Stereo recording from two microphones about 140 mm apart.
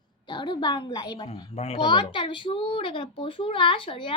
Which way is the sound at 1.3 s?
45° left (ahead or behind).